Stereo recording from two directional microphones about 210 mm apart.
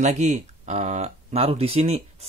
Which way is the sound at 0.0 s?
35° right (ahead or behind).